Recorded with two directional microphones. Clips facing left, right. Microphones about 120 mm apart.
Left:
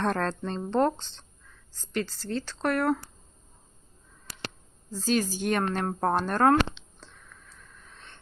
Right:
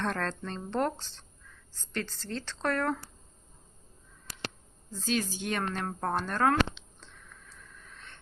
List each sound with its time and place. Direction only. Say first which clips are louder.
0.0 s speech: left 5 dB; 40° left (ahead or behind)
1.9 s speech: left 5 dB; 10° left (ahead or behind)
4.9 s speech: left 5 dB; 40° left (ahead or behind)